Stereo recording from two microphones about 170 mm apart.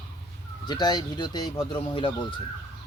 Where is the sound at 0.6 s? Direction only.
25° left (ahead or behind).